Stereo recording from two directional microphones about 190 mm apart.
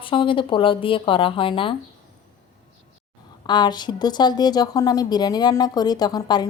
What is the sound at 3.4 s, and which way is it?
A woman's voice, 20° left (ahead or behind).